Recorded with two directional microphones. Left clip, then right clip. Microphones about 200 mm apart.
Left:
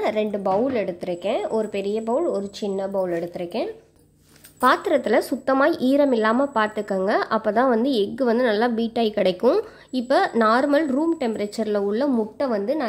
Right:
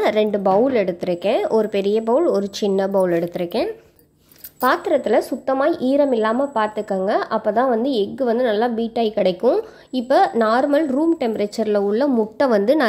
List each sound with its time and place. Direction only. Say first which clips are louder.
0.0 s a woman's voice: right 5 dB; 10° right (ahead or behind)
4.6 s speech: right 1 dB; centre (ahead or behind)
12.4 s a woman's voice: right 7 dB; 20° right (ahead or behind)